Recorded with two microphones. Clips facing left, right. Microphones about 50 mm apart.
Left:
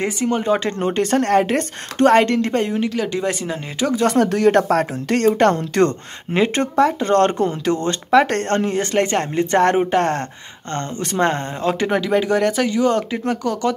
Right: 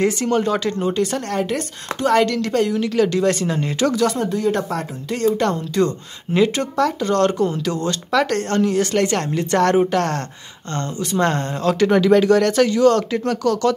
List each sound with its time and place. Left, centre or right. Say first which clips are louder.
0.0 s speech: right 2 dB; centre
0.7 s a woman's voice: left 1 dB; left
3.1 s speech: right 3 dB; centre
4.1 s speech: left 5 dB; left
6.3 s speech: left 1 dB; left
11.9 s speech: right 6 dB; centre